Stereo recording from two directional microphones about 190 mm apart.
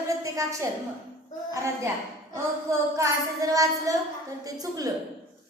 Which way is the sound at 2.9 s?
15° right (ahead or behind).